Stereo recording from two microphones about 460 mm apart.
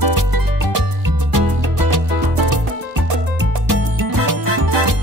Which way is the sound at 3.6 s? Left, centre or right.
Right.